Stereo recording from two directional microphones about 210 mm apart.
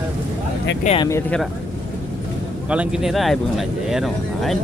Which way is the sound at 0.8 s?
30° left (ahead or behind).